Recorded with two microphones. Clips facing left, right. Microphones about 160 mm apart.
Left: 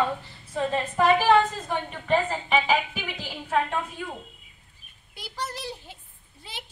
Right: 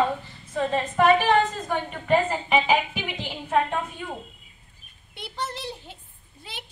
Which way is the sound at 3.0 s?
20° right (ahead or behind).